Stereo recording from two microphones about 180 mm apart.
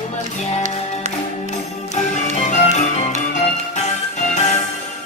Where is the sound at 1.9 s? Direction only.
40° left (ahead or behind).